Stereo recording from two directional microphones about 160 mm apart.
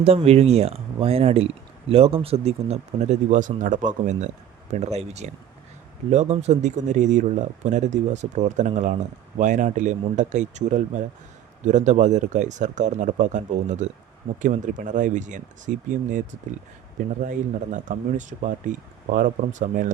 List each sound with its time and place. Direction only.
0.0 s speech: 40° right (ahead or behind)
17.2 s speech: 55° right (ahead or behind)